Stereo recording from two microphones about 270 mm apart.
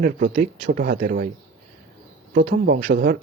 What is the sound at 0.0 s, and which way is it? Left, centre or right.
Speech, right.